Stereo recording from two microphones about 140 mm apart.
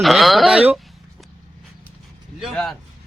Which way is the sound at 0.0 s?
Centre (ahead or behind).